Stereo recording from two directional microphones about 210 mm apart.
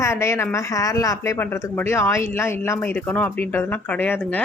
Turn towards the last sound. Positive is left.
turn(degrees=10)  # may be behind; listen again after turning